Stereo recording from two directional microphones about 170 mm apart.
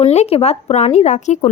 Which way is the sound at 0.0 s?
40° left (ahead or behind).